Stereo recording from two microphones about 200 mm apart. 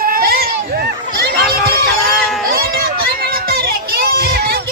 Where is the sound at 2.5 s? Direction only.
50° right (ahead or behind).